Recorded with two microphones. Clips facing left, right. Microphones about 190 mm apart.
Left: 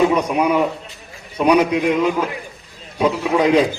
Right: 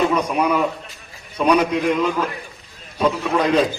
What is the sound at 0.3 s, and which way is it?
A man's voice, 15° left (ahead or behind).